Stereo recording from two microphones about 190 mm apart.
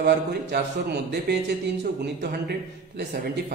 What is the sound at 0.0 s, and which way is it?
A man's voice, 60° right (ahead or behind).